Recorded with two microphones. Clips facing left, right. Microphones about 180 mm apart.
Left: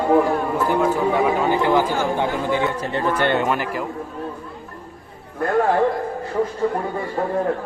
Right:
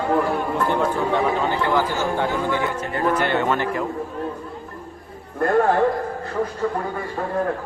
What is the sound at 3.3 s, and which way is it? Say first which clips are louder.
Speech: even; 10° left (ahead or behind).